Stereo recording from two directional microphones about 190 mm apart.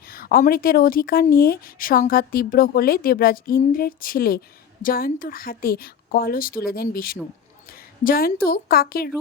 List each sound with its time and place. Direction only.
0.0 s a woman's voice: 50° left (ahead or behind)